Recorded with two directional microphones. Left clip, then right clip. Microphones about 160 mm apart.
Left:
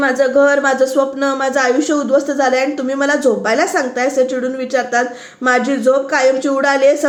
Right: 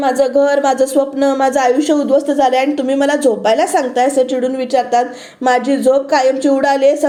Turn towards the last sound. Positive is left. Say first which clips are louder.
# even
turn(degrees=-20)  # may be behind; listen again after turning